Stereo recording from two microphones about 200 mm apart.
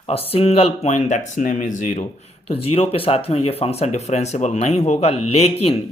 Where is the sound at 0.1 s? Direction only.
30° left (ahead or behind).